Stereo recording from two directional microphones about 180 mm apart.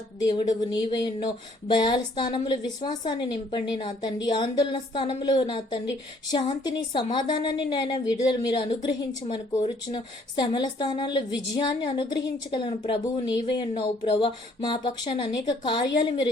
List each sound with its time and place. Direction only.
0.2 s a woman's voice: 25° left (ahead or behind)